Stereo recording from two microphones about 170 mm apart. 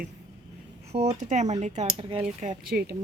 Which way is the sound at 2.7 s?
70° right (ahead or behind).